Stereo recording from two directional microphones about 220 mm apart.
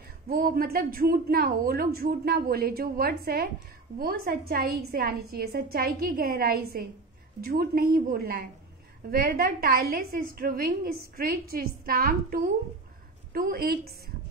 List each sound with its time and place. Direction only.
0.3 s a woman's voice: 40° right (ahead or behind)